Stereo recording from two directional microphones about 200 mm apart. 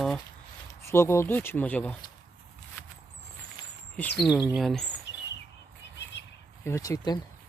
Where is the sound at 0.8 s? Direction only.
15° left (ahead or behind).